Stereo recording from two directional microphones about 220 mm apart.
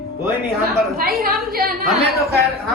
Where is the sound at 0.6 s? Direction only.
45° right (ahead or behind).